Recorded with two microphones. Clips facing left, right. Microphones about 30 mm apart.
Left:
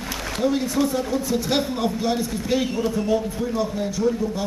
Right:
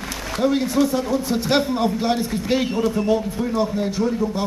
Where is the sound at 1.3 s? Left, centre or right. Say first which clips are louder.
Right 3 dB; right.